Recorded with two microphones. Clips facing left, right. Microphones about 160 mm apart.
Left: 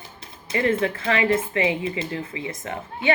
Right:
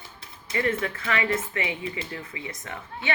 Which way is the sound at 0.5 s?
30° left (ahead or behind).